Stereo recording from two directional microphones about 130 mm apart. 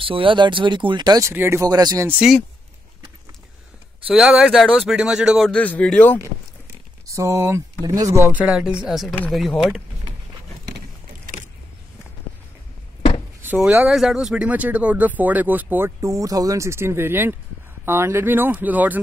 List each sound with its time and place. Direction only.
0.0 s speech: 45° right (ahead or behind)
1.3 s speech: 20° right (ahead or behind)
4.1 s speech: 5° right (ahead or behind)
5.5 s a man's voice: 10° left (ahead or behind)
7.1 s speech: 20° right (ahead or behind)
8.4 s speech: 10° right (ahead or behind)
13.6 s speech: 15° right (ahead or behind)
13.8 s speech: 5° right (ahead or behind)
16.0 s speech: 25° right (ahead or behind)